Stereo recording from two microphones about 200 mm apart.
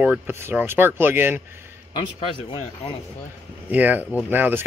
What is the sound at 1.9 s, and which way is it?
Speech, 25° left (ahead or behind).